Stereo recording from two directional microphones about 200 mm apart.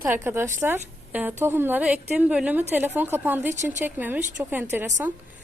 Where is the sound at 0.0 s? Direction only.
10° right (ahead or behind).